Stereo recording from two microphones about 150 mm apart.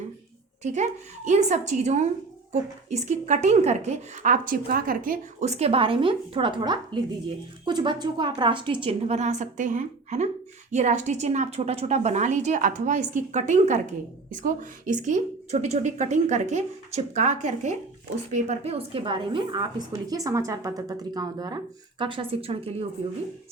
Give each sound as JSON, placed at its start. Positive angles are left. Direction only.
{"t": 0.6, "sound": "a woman's voice", "side_deg": -55}